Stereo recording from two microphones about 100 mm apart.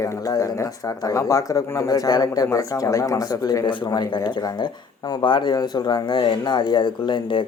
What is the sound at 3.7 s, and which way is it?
Speech, 50° left (ahead or behind).